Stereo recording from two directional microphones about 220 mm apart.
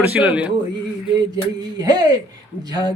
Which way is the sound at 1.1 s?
20° right (ahead or behind).